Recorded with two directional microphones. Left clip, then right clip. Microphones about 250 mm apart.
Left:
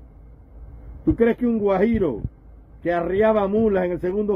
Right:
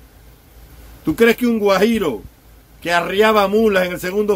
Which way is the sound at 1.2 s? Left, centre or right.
Centre.